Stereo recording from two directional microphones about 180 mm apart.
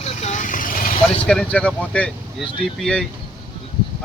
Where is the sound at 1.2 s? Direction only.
5° left (ahead or behind).